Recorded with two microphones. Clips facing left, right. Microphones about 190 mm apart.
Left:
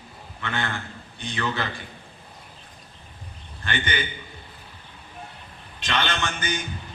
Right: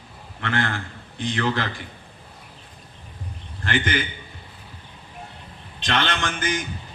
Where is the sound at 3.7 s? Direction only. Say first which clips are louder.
Right 4 dB; 75° right (ahead or behind).